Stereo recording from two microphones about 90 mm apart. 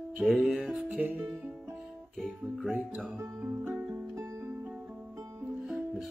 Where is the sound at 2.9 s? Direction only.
5° right (ahead or behind).